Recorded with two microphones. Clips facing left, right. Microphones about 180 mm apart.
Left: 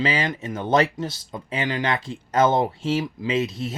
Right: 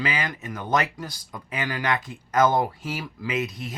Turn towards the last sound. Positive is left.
turn(degrees=25)  # may be behind; listen again after turning